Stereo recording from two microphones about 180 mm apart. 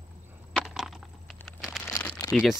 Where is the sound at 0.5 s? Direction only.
5° right (ahead or behind).